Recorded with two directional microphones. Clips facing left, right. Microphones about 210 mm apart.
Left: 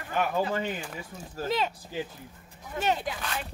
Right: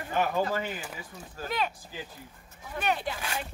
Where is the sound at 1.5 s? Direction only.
25° left (ahead or behind).